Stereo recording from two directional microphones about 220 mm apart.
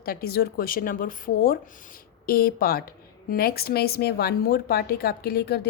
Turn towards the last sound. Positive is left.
turn(degrees=45)  # may be behind; listen again after turning